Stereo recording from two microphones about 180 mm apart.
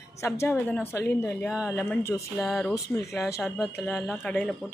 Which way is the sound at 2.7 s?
15° left (ahead or behind).